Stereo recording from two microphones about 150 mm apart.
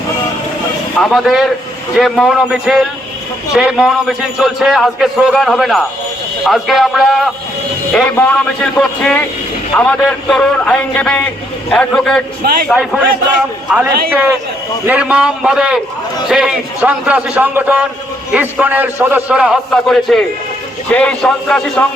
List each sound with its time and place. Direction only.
0.9 s a man's voice: centre (ahead or behind)